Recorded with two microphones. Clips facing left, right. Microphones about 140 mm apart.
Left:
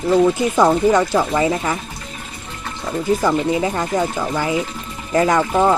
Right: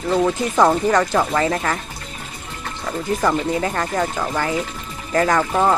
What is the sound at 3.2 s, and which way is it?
Speech, 10° left (ahead or behind).